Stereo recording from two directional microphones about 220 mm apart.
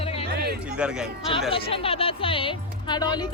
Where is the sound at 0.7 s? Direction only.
5° right (ahead or behind).